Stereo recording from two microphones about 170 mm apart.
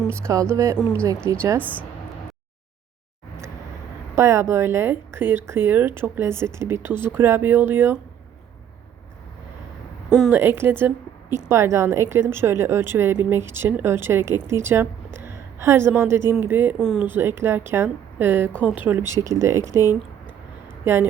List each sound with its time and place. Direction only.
0.1 s speech: 15° right (ahead or behind)
4.1 s speech: 15° right (ahead or behind)
10.1 s a woman's voice: centre (ahead or behind)
10.3 s a woman's voice: 15° right (ahead or behind)